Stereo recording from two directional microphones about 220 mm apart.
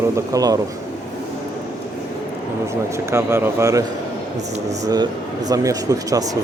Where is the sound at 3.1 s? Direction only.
10° right (ahead or behind).